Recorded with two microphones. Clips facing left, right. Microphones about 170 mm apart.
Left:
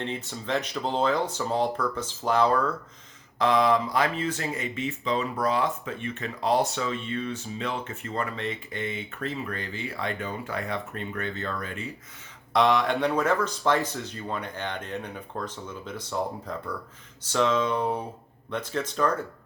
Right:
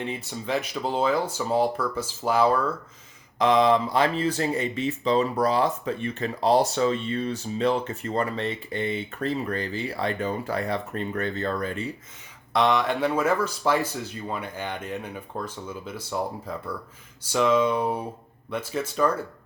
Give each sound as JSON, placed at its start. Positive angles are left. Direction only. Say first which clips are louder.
{"t": 0.3, "sound": "speech", "louder": "right 1 dB", "side_deg": 0}
{"t": 3.3, "sound": "speech", "louder": "right 3 dB", "side_deg": -20}
{"t": 12.5, "sound": "speech", "louder": "even", "side_deg": 0}